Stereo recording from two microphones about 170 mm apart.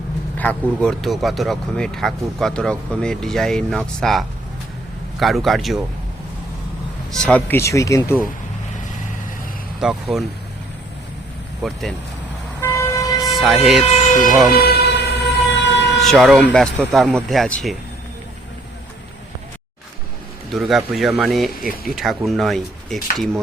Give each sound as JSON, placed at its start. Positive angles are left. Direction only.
{"t": 0.3, "sound": "speech", "side_deg": 5}
{"t": 5.2, "sound": "speech", "side_deg": 0}
{"t": 7.1, "sound": "speech", "side_deg": 5}
{"t": 9.8, "sound": "speech", "side_deg": 0}
{"t": 11.6, "sound": "speech", "side_deg": 0}
{"t": 12.5, "sound": "vehicle", "side_deg": 15}
{"t": 13.2, "sound": "a sound", "side_deg": 0}
{"t": 14.3, "sound": "speech", "side_deg": 0}
{"t": 14.6, "sound": "vehicle", "side_deg": 70}
{"t": 16.0, "sound": "speech", "side_deg": 0}
{"t": 20.5, "sound": "speech", "side_deg": 0}